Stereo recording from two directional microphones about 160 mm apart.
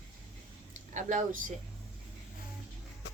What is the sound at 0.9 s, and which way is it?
Speech, 50° right (ahead or behind).